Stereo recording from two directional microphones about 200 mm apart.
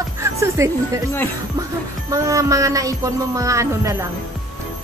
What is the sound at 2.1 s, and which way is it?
A man's voice, 15° right (ahead or behind).